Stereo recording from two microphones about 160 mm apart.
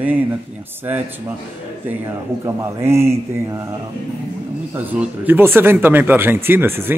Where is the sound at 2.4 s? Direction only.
15° right (ahead or behind).